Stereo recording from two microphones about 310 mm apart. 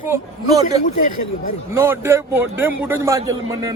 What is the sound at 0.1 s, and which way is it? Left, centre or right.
A man's voice, centre.